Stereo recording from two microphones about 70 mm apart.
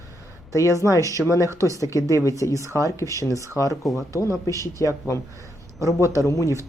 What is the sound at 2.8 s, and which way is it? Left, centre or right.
Speech, left.